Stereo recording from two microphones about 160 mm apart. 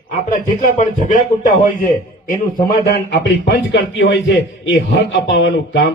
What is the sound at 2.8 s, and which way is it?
Speech, 90° left.